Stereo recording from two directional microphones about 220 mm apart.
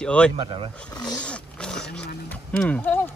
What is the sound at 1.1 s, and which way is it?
Roaring cats, 5° left (ahead or behind).